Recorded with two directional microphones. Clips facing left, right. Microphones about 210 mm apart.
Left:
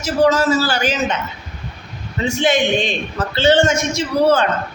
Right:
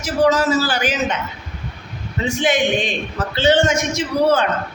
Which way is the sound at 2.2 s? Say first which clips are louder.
Left 1 dB; 15° right (ahead or behind).